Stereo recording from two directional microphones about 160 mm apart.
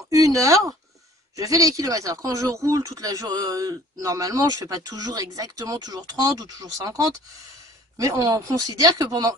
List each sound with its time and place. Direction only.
0.1 s speech: 20° right (ahead or behind)